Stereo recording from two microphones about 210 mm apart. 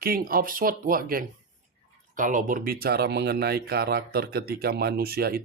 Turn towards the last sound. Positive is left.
turn(degrees=-45)  # may be behind; listen again after turning